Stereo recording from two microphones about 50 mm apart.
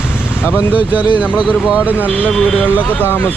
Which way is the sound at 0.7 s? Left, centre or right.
Right.